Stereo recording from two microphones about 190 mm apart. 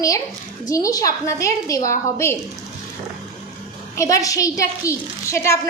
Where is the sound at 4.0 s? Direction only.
15° left (ahead or behind).